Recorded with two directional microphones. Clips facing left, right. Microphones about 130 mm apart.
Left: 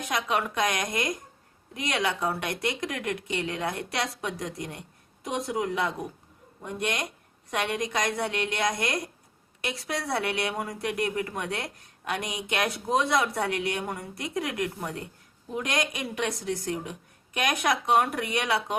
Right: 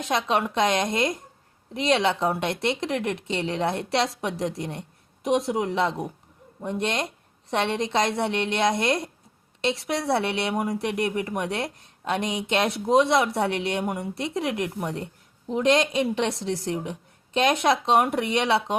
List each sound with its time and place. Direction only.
0.0 s speech: 25° right (ahead or behind)